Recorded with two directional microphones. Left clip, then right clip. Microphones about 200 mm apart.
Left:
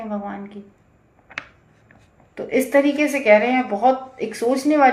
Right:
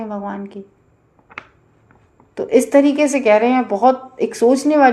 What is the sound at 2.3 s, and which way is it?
A woman's voice, 40° right (ahead or behind).